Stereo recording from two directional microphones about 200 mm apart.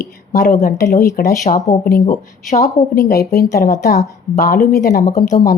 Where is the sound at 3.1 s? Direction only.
50° left (ahead or behind).